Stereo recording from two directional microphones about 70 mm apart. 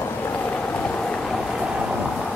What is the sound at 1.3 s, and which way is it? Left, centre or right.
Vehicle, centre.